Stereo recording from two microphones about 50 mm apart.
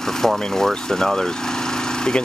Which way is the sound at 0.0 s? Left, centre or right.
Centre.